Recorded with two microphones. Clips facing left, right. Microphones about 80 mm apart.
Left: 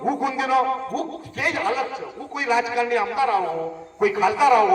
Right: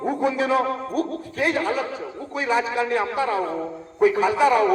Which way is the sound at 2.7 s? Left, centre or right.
Right.